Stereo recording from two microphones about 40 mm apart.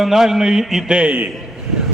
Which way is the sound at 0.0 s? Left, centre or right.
Centre.